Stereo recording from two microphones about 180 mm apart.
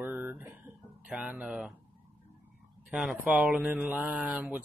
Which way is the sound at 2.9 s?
10° right (ahead or behind).